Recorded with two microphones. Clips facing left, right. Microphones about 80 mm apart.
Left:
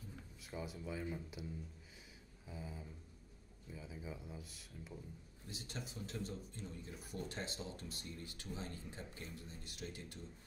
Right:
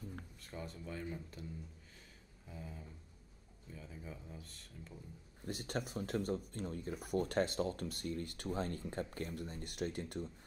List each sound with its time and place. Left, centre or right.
0.4 s speech: centre
2.4 s speech: centre
5.4 s speech: right